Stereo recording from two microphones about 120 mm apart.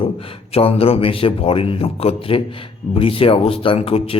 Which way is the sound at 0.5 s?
55° left (ahead or behind).